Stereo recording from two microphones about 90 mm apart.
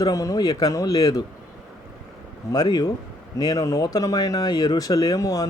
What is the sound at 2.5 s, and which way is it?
Speech, 50° left (ahead or behind).